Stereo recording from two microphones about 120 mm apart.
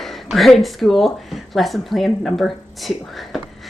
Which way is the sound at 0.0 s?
Centre (ahead or behind).